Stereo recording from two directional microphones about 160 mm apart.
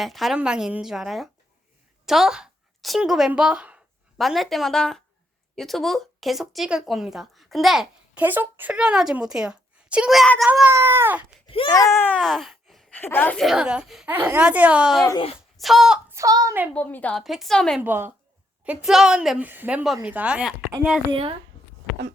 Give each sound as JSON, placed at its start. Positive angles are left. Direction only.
{"t": 0.0, "sound": "speech", "side_deg": 0}
{"t": 10.7, "sound": "speech", "side_deg": -15}
{"t": 11.4, "sound": "wail", "side_deg": 35}
{"t": 11.7, "sound": "a sound", "side_deg": 20}
{"t": 13.0, "sound": "a woman's voice", "side_deg": 10}
{"t": 13.4, "sound": "speech", "side_deg": -5}
{"t": 16.0, "sound": "child singing", "side_deg": -20}
{"t": 16.7, "sound": "speech", "side_deg": 10}
{"t": 17.7, "sound": "speech", "side_deg": -10}
{"t": 21.1, "sound": "speech", "side_deg": -35}